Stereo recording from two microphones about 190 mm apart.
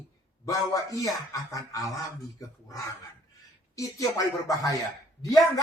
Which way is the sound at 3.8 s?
15° left (ahead or behind).